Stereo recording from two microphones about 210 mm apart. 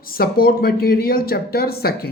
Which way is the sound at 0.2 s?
45° left (ahead or behind).